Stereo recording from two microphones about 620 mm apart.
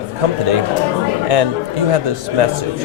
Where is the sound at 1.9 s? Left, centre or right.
Right.